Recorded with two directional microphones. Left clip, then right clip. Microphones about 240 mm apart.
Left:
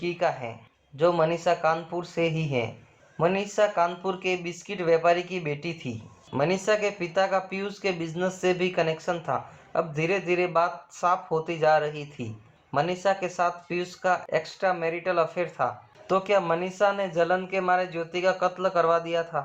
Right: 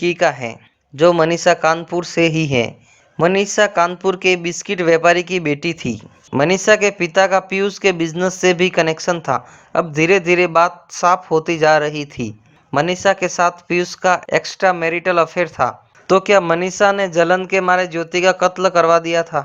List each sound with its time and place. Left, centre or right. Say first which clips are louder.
0.0 s speech: right 11 dB; right